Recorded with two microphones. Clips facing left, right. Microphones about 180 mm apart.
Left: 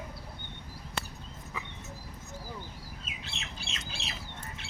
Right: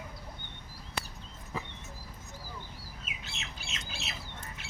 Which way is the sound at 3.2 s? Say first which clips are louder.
Left 3 dB; 30° left (ahead or behind).